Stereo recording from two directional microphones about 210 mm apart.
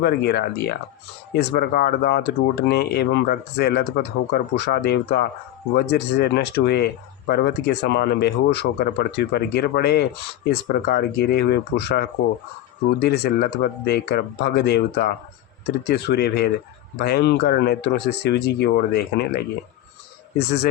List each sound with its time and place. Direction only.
0.0 s speech: 50° left (ahead or behind)